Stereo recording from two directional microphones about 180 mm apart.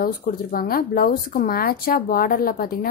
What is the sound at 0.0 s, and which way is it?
Speech, 55° left (ahead or behind).